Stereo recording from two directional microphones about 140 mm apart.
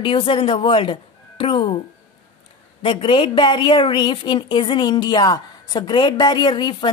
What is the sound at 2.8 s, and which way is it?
A woman's voice, 40° left (ahead or behind).